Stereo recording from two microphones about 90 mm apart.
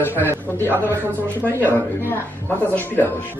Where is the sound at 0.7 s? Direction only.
25° right (ahead or behind).